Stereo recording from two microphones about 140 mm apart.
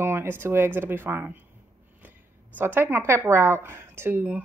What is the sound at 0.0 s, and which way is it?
Speech, 15° right (ahead or behind).